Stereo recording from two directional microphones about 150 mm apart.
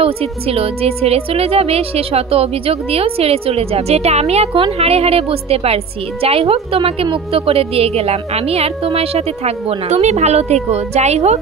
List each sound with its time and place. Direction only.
0.0 s a woman's voice: 40° right (ahead or behind)